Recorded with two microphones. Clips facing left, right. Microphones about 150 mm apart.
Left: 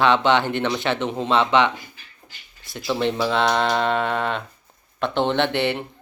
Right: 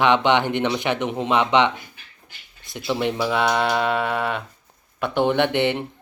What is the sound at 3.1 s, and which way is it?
A man's voice, 10° right (ahead or behind).